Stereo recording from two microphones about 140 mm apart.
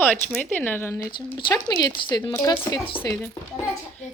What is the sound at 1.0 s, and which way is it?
Speech, 30° left (ahead or behind).